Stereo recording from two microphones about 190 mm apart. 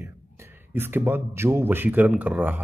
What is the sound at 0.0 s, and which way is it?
Speech, 10° right (ahead or behind).